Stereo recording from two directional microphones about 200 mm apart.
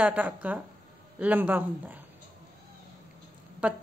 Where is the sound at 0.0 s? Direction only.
5° right (ahead or behind).